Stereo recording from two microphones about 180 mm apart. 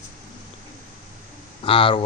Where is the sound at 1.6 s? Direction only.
30° left (ahead or behind).